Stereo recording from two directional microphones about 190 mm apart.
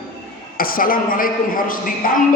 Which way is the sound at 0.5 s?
50° left (ahead or behind).